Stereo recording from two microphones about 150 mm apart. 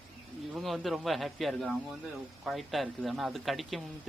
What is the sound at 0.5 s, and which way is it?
Speech, centre (ahead or behind).